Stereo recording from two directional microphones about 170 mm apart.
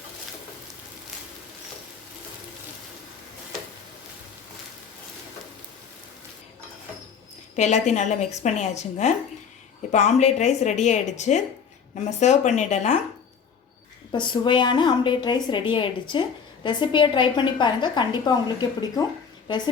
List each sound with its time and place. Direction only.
7.5 s a woman's voice: 45° left (ahead or behind)
14.1 s a woman's voice: 25° left (ahead or behind)